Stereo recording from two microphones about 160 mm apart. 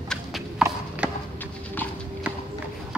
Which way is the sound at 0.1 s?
Centre (ahead or behind).